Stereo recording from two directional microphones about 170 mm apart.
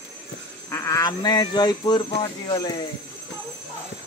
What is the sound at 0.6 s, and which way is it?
Speech, 15° left (ahead or behind).